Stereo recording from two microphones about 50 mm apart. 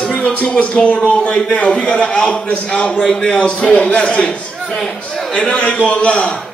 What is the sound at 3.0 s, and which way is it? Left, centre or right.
A man's voice, centre.